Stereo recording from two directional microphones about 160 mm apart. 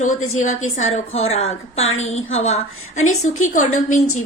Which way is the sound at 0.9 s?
40° left (ahead or behind).